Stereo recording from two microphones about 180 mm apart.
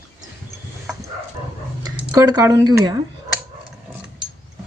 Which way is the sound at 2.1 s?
20° right (ahead or behind).